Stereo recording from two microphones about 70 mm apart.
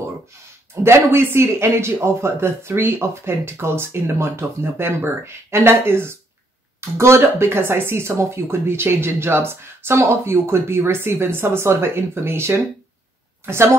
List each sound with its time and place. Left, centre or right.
0.8 s speech: right